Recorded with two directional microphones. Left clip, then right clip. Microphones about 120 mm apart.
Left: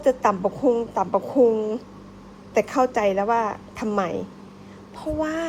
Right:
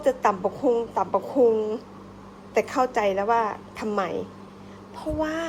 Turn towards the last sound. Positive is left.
turn(degrees=-15)  # may be behind; listen again after turning